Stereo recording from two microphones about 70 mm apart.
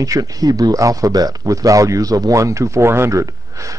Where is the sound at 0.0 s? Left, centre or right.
Right.